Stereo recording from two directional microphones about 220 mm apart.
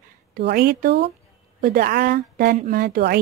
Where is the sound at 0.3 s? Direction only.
45° right (ahead or behind).